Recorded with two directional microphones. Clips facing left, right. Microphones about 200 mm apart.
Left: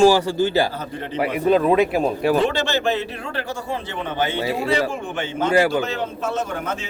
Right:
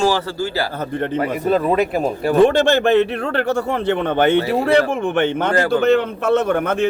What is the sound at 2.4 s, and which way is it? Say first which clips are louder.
A man's voice: right 7 dB; 55° right (ahead or behind).